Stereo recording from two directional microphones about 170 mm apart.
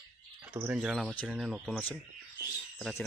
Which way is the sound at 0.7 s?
5° right (ahead or behind).